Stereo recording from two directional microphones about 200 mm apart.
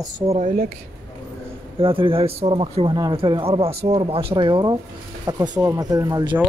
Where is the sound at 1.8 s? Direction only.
25° right (ahead or behind).